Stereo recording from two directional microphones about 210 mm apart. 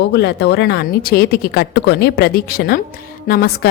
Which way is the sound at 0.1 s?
55° left (ahead or behind).